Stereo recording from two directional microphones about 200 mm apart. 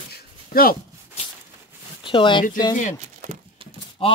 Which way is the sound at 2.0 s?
25° left (ahead or behind).